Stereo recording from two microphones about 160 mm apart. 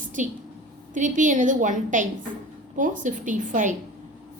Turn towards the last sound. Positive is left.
turn(degrees=-55)  # may be behind; listen again after turning